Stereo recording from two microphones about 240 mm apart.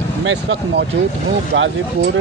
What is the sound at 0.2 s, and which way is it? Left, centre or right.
Speech, right.